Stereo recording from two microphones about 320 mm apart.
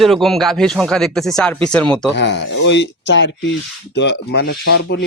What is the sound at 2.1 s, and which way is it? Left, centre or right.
Speech, left.